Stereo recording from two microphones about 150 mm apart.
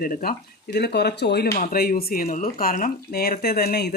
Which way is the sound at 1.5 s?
75° left (ahead or behind).